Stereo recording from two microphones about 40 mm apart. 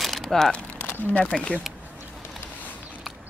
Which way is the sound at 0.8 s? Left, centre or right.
Left.